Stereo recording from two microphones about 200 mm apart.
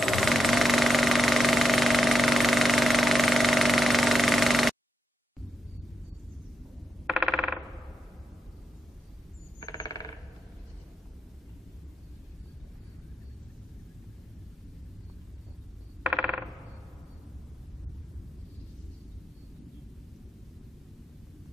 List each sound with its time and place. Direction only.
0.0 s jackhammer: centre (ahead or behind)
7.1 s coin: 5° right (ahead or behind)
9.6 s squeal: 20° left (ahead or behind)
16.0 s mechanisms: 5° right (ahead or behind)